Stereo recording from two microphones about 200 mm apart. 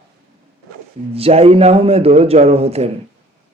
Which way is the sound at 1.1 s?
30° right (ahead or behind).